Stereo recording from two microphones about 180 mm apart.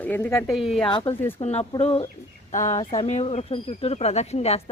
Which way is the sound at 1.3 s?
35° left (ahead or behind).